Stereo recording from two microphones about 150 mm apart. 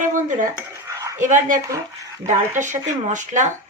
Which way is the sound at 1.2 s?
55° right (ahead or behind).